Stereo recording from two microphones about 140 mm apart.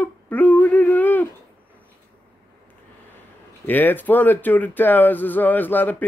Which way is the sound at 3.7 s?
15° left (ahead or behind).